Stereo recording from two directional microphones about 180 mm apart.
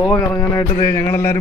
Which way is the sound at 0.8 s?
15° left (ahead or behind).